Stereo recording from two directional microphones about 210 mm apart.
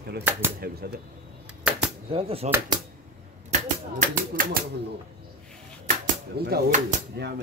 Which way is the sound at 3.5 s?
35° right (ahead or behind).